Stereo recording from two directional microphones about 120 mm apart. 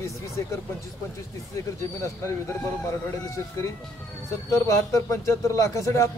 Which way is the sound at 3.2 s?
25° left (ahead or behind).